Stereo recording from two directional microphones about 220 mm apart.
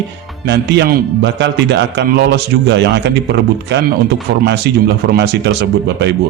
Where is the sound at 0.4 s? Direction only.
50° right (ahead or behind).